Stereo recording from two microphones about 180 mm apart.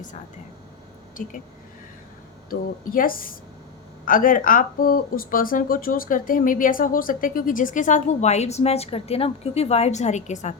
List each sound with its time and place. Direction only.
2.5 s speech: 50° left (ahead or behind)